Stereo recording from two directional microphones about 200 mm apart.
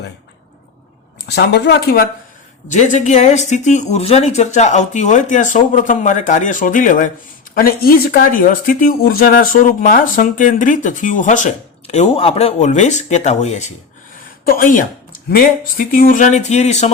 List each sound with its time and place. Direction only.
1.4 s speech: 55° left (ahead or behind)
2.6 s speech: 35° left (ahead or behind)